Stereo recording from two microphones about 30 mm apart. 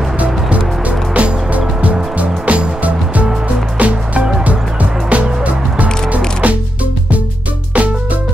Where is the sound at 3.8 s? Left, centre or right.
Right.